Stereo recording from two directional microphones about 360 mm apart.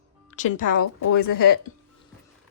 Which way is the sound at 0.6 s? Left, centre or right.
Left.